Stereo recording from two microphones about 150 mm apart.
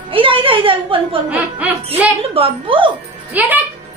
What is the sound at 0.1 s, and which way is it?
A woman's voice, 35° right (ahead or behind).